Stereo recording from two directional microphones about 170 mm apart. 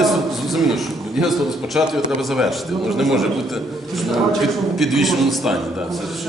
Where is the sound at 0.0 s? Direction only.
Centre (ahead or behind).